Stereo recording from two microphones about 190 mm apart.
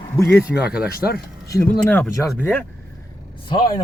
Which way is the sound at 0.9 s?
55° left (ahead or behind).